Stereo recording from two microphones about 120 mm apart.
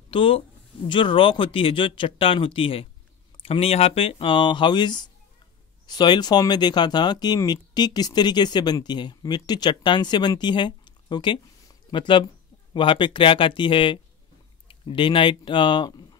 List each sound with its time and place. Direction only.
0.1 s speech: 50° left (ahead or behind)